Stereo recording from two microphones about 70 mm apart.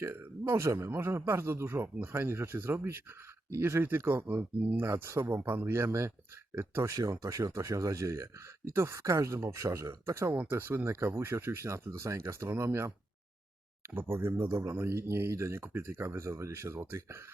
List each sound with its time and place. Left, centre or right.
0.0 s a man's voice: right
0.5 s a man's voice: right
5.4 s speech: right
10.5 s a man's voice: right